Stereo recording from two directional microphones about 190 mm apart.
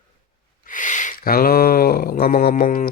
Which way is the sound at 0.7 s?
40° left (ahead or behind).